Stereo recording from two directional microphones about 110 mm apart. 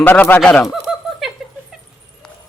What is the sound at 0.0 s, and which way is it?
Speech, 15° left (ahead or behind).